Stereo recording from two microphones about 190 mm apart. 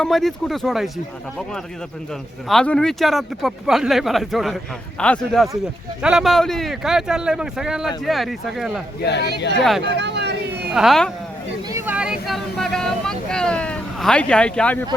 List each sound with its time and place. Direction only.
0.0 s speech: centre (ahead or behind)
2.5 s speech: 5° left (ahead or behind)
9.0 s speech: 65° left (ahead or behind)
9.8 s vehicle: 65° right (ahead or behind)
10.7 s speech: centre (ahead or behind)
11.7 s a sound: 5° right (ahead or behind)
12.2 s speech: centre (ahead or behind)